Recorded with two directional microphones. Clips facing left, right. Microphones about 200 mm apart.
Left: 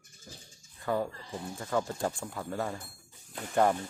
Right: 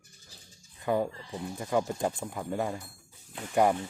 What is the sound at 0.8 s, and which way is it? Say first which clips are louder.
Speech: right 3 dB; 15° right (ahead or behind).